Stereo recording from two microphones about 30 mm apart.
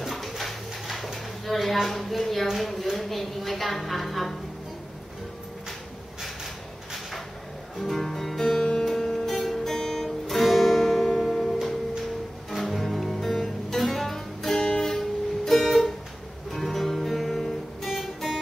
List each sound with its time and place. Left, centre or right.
0.4 s a sound: centre
3.0 s a woman's voice: centre
7.8 s music: centre
14.6 s music: left
14.9 s music: centre